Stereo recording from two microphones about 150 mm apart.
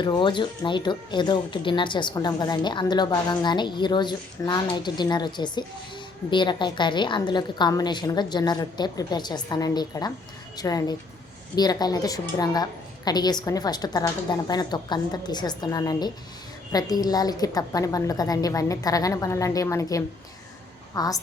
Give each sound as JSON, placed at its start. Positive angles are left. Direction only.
{"t": 0.0, "sound": "a woman's voice", "side_deg": 30}